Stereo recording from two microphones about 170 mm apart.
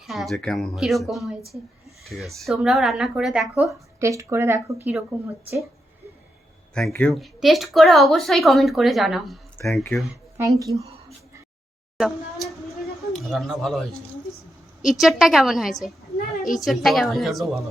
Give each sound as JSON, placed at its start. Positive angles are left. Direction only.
{"t": 0.1, "sound": "speech", "side_deg": 0}
{"t": 4.0, "sound": "speech", "side_deg": -20}
{"t": 7.1, "sound": "speech", "side_deg": 0}
{"t": 10.3, "sound": "speech", "side_deg": -20}
{"t": 11.9, "sound": "a woman's voice", "side_deg": 0}